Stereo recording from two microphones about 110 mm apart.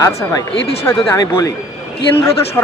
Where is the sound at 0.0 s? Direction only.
30° left (ahead or behind).